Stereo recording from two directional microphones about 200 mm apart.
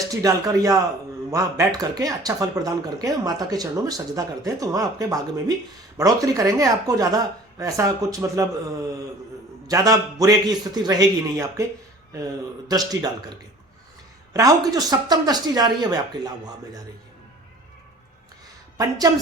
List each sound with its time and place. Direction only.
0.0 s speech: 15° right (ahead or behind)
14.3 s speech: 20° right (ahead or behind)
18.8 s speech: 20° right (ahead or behind)